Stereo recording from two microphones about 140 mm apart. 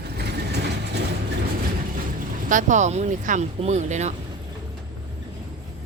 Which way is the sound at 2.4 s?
65° right (ahead or behind).